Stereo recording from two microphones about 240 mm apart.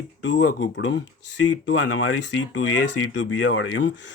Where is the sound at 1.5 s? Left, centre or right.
Left.